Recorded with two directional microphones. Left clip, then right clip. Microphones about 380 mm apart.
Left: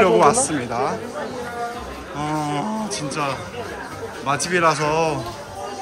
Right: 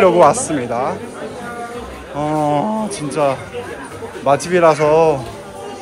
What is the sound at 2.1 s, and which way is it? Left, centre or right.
Speech, centre.